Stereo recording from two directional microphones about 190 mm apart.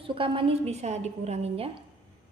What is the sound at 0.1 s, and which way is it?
A woman's voice, 30° right (ahead or behind).